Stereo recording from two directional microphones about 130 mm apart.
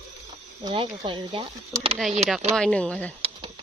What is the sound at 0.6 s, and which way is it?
Speech, 35° right (ahead or behind).